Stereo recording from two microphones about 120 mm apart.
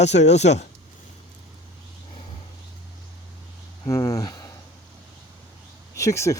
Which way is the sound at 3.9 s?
25° left (ahead or behind).